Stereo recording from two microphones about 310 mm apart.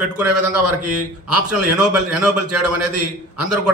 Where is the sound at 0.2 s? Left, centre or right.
Right.